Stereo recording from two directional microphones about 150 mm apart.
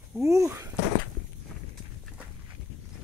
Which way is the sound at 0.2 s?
20° right (ahead or behind).